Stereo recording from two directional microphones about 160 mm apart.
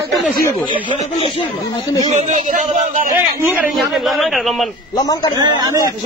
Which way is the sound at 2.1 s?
50° right (ahead or behind).